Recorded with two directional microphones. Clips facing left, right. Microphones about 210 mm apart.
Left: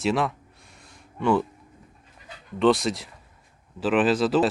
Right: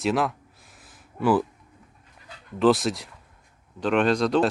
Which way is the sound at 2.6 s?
Centre (ahead or behind).